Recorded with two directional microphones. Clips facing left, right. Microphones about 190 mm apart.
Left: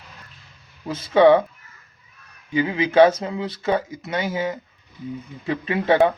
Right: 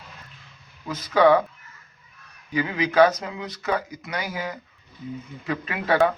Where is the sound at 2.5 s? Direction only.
25° left (ahead or behind).